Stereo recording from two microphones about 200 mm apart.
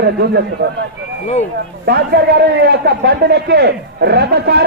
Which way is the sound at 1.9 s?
55° right (ahead or behind).